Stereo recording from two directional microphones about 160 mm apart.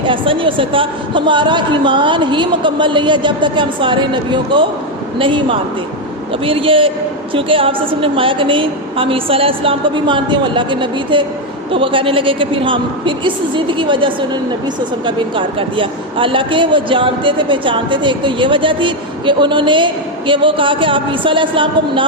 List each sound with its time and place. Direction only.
0.0 s a man's voice: 30° right (ahead or behind)